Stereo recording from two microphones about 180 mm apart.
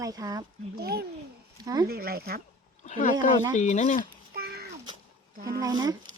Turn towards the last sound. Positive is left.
turn(degrees=-20)  # may be behind; listen again after turning